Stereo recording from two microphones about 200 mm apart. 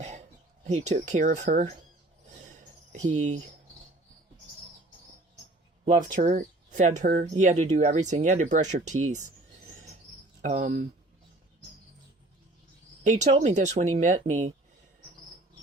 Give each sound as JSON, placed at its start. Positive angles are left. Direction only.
{"t": 0.0, "sound": "a sound", "side_deg": -35}
{"t": 0.7, "sound": "speech", "side_deg": -35}
{"t": 2.5, "sound": "cricket", "side_deg": -35}
{"t": 5.8, "sound": "speech", "side_deg": -40}
{"t": 10.4, "sound": "speech", "side_deg": -35}
{"t": 13.1, "sound": "speech", "side_deg": -35}